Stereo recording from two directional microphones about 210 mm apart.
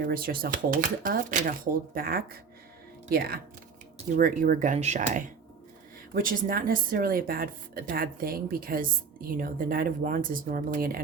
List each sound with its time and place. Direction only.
0.0 s speech: 45° right (ahead or behind)